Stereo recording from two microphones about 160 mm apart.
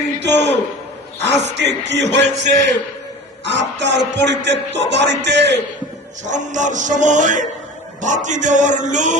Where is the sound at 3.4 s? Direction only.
90° right.